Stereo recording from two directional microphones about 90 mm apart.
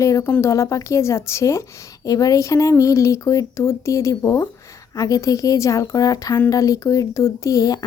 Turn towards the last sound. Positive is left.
turn(degrees=45)  # may be behind; listen again after turning